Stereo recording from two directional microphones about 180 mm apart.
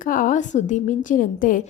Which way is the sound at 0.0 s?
50° left (ahead or behind).